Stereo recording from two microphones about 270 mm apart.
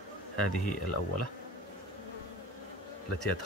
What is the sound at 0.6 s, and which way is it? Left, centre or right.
Speech, left.